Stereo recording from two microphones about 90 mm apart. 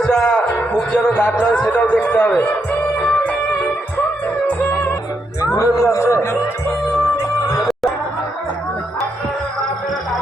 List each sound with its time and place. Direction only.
0.0 s speech: 10° left (ahead or behind)
4.4 s music: 20° left (ahead or behind)
5.5 s a man's voice: 35° left (ahead or behind)
7.6 s a sound: centre (ahead or behind)